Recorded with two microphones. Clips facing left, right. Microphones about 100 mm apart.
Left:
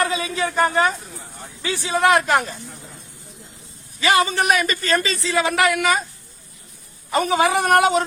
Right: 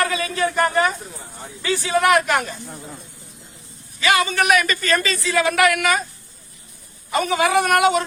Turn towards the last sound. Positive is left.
turn(degrees=35)  # may be behind; listen again after turning